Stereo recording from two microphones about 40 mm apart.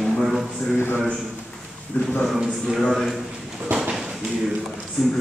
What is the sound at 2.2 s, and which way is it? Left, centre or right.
Speech, centre.